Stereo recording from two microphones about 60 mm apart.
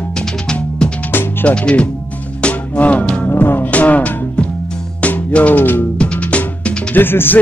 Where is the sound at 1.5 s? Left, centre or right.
Centre.